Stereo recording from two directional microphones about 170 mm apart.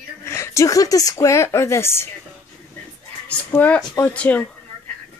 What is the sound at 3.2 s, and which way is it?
A child's voice, 10° left (ahead or behind).